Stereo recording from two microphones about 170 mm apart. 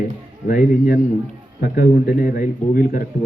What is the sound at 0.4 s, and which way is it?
A man's voice, 55° left (ahead or behind).